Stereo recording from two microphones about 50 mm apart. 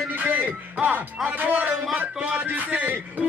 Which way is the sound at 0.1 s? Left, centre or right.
Right.